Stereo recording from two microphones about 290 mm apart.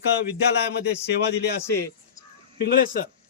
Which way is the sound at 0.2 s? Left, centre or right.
Left.